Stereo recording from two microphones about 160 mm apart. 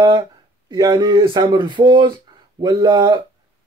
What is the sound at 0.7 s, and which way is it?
Speech, 25° right (ahead or behind).